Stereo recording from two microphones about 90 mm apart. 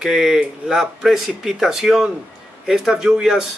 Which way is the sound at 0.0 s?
5° right (ahead or behind).